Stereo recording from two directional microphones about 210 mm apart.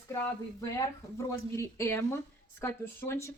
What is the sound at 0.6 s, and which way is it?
Speech, 15° left (ahead or behind).